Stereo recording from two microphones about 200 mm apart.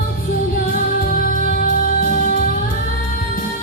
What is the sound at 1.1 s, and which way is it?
Music, 45° left (ahead or behind).